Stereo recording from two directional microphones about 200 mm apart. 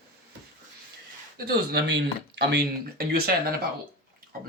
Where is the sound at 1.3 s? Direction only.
50° right (ahead or behind).